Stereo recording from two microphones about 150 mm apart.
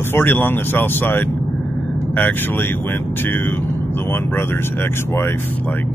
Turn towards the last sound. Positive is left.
turn(degrees=15)  # may be behind; listen again after turning